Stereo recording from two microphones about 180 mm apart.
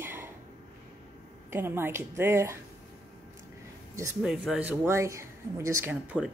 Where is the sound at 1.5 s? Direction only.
15° right (ahead or behind).